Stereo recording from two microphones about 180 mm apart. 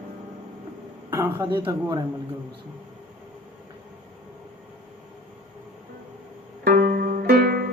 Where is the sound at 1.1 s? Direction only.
15° right (ahead or behind).